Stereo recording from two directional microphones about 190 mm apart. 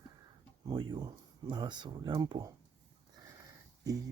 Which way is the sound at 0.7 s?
25° right (ahead or behind).